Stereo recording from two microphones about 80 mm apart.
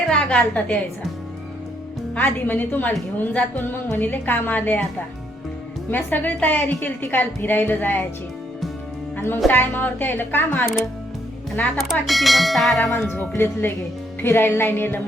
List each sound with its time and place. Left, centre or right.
0.1 s a woman's voice: centre
2.1 s speech: left
5.9 s speech: left
9.1 s speech: left
11.8 s speech: centre
13.1 s speech: left